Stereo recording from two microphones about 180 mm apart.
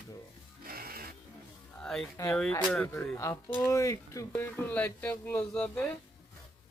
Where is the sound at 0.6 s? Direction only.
55° right (ahead or behind).